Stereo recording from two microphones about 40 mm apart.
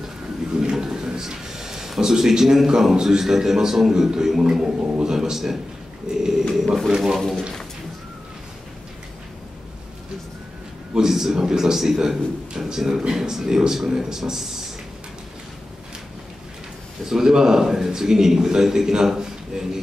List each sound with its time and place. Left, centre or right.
0.6 s a man's voice: centre
6.1 s a sound: right
6.5 s speech: centre
7.2 s a man's voice: centre
11.0 s a man's voice: centre
17.0 s a man's voice: centre